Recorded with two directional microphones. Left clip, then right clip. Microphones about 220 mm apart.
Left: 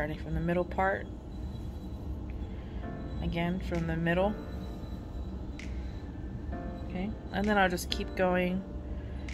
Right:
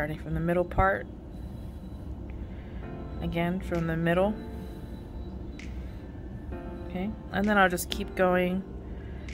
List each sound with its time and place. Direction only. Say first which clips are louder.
0.0 s speech: right 3 dB; 20° right (ahead or behind)
3.2 s speech: right 4 dB; 20° right (ahead or behind)
6.9 s speech: right 5 dB; 20° right (ahead or behind)